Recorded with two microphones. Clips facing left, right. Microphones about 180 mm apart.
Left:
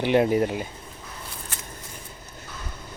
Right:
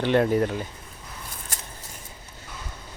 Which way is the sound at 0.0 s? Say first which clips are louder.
Left 1 dB; 15° left (ahead or behind).